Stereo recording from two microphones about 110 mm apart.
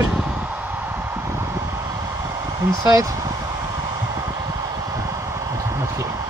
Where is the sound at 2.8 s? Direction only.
30° right (ahead or behind).